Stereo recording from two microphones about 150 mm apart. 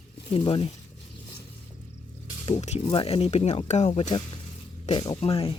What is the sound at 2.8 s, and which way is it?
Speech, 35° left (ahead or behind).